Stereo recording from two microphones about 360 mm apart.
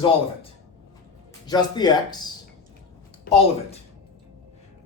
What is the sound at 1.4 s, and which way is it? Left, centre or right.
Speech, centre.